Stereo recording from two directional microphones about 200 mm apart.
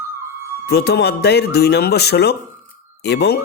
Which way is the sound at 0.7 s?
55° left (ahead or behind).